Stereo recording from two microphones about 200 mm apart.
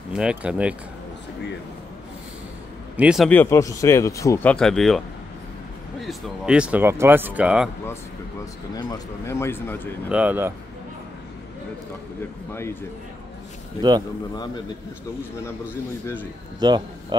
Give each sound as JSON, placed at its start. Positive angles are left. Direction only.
{"t": 0.1, "sound": "speech", "side_deg": -5}
{"t": 3.0, "sound": "speech", "side_deg": -5}
{"t": 3.3, "sound": "speech", "side_deg": 10}
{"t": 8.7, "sound": "speech", "side_deg": 15}
{"t": 10.1, "sound": "speech", "side_deg": -10}
{"t": 16.5, "sound": "a man's voice", "side_deg": -20}